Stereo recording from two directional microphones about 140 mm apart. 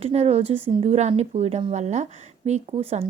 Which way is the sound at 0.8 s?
50° right (ahead or behind).